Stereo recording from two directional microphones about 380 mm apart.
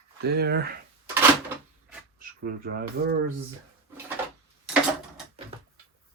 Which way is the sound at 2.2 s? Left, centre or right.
Right.